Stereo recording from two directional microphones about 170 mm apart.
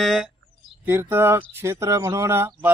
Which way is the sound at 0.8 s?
10° right (ahead or behind).